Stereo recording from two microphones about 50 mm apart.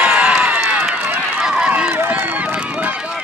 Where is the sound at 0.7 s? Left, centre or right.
Right.